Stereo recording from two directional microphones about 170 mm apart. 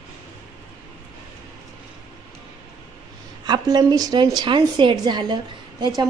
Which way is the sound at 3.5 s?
25° right (ahead or behind).